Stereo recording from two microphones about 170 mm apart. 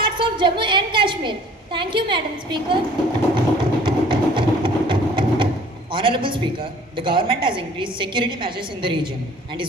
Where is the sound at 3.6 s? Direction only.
30° right (ahead or behind).